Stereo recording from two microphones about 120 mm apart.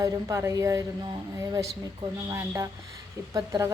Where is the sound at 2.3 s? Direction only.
25° right (ahead or behind).